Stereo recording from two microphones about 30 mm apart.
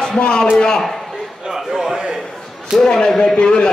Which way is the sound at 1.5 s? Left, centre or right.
Centre.